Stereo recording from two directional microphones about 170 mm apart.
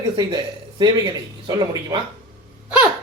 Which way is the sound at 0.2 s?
25° right (ahead or behind).